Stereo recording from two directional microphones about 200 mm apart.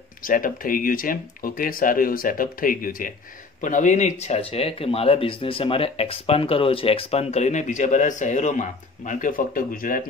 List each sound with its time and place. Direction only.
0.2 s speech: 45° left (ahead or behind)